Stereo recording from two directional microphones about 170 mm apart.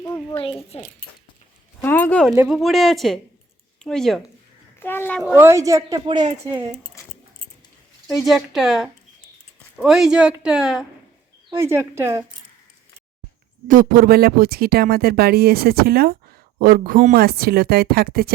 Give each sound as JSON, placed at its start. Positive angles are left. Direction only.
{"t": 0.7, "sound": "speech", "side_deg": 35}
{"t": 1.8, "sound": "a child's voice", "side_deg": 10}
{"t": 2.5, "sound": "speech", "side_deg": 0}
{"t": 4.8, "sound": "a child's voice", "side_deg": 15}
{"t": 5.2, "sound": "a woman's voice", "side_deg": -15}
{"t": 8.0, "sound": "speech", "side_deg": 0}
{"t": 11.5, "sound": "a woman's voice", "side_deg": -15}
{"t": 13.7, "sound": "speech", "side_deg": -55}
{"t": 17.2, "sound": "speech", "side_deg": -65}